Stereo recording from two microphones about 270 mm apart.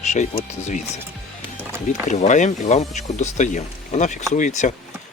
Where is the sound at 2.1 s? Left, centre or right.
Left.